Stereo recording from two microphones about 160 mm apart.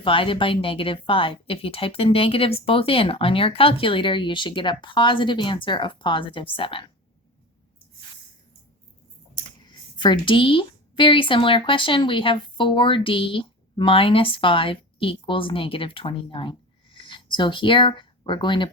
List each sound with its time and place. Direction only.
0.0 s speech: 35° left (ahead or behind)
9.3 s speech: 30° left (ahead or behind)